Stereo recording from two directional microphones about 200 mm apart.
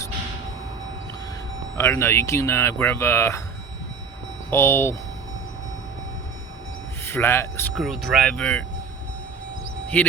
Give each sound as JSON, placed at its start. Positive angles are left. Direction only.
{"t": 1.7, "sound": "speech", "side_deg": 15}
{"t": 4.5, "sound": "speech", "side_deg": 15}
{"t": 7.0, "sound": "speech", "side_deg": 10}
{"t": 7.8, "sound": "speech", "side_deg": 0}